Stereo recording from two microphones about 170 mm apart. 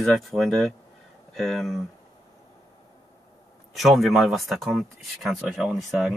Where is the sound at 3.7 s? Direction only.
Centre (ahead or behind).